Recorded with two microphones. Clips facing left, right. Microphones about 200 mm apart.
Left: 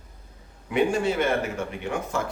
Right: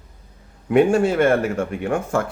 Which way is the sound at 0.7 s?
50° right (ahead or behind).